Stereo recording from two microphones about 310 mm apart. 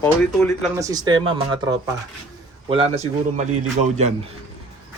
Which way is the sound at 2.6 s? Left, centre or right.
Centre.